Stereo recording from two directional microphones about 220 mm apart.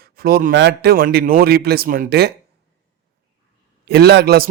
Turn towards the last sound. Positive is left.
turn(degrees=-45)  # may be behind; listen again after turning